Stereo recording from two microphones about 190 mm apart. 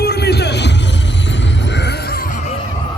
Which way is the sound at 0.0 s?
55° left (ahead or behind).